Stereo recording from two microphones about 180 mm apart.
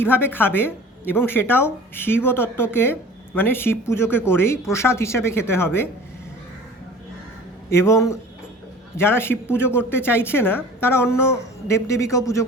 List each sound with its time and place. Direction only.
0.0 s a woman's voice: 10° left (ahead or behind)
7.7 s a woman's voice: 15° left (ahead or behind)